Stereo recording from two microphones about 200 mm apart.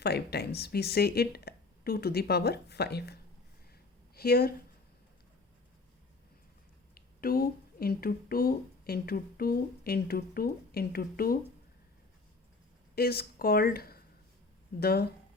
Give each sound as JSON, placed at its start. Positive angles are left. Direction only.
{"t": 0.0, "sound": "speech", "side_deg": 55}
{"t": 6.9, "sound": "speech", "side_deg": 45}
{"t": 13.0, "sound": "speech", "side_deg": 50}